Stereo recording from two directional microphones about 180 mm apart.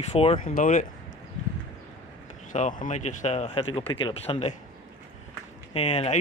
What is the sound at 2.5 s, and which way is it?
Speech, 45° left (ahead or behind).